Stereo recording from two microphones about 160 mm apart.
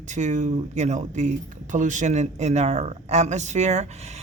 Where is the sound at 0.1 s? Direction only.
50° right (ahead or behind).